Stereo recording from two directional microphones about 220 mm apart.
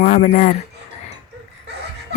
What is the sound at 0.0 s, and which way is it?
Speech, 35° left (ahead or behind).